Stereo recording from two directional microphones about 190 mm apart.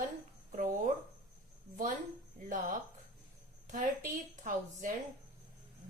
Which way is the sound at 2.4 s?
45° right (ahead or behind).